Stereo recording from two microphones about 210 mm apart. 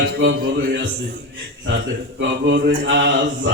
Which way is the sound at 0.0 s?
60° right (ahead or behind).